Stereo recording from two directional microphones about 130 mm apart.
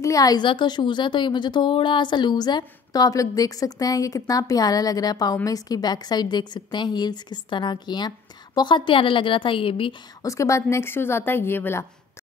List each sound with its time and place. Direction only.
0.0 s a woman's voice: 30° left (ahead or behind); by 9.9 s 45° left (ahead or behind)
10.2 s a woman's voice: 25° left (ahead or behind)